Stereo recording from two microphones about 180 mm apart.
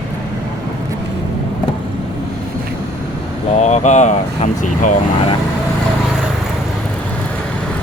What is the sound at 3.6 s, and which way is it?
Speech, 40° left (ahead or behind).